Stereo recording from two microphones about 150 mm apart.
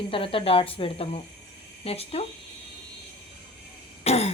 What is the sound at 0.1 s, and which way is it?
A woman's voice, 35° left (ahead or behind).